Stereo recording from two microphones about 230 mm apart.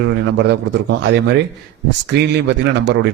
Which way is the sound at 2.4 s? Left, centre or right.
Right.